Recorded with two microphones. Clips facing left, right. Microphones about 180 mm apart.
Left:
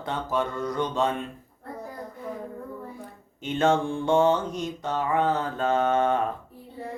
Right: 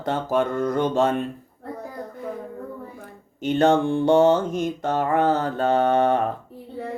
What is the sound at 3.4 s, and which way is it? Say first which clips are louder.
Mantra: right 5 dB; 40° right (ahead or behind).